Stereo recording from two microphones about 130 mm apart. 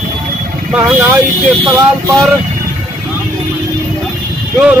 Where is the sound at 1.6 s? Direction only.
25° right (ahead or behind).